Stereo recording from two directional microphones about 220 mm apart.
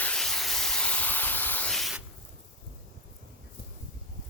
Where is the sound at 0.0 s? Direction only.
5° left (ahead or behind).